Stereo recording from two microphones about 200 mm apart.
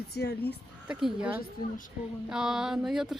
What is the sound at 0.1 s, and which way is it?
Speech, 55° left (ahead or behind).